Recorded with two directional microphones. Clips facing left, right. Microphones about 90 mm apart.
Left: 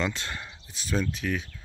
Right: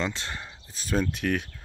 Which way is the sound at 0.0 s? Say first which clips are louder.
Even; 25° right (ahead or behind).